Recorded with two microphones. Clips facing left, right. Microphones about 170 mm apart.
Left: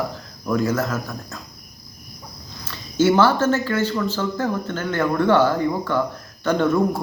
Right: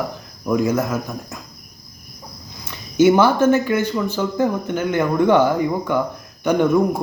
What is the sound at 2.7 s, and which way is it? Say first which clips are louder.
Speech: right 4 dB; 15° right (ahead or behind).